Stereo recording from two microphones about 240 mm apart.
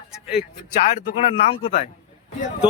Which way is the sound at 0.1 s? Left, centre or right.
Centre.